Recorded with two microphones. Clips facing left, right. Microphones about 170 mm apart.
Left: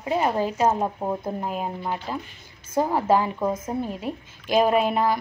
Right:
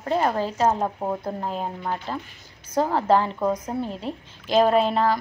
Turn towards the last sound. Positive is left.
turn(degrees=10)  # may be behind; listen again after turning